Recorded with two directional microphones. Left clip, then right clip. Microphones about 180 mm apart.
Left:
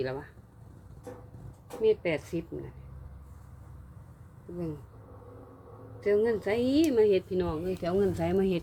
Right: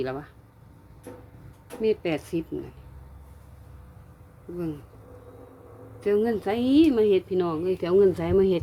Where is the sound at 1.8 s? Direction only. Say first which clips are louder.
Right 1 dB; 35° right (ahead or behind).